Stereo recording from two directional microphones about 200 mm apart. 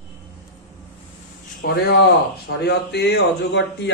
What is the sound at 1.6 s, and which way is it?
Speech, 55° left (ahead or behind).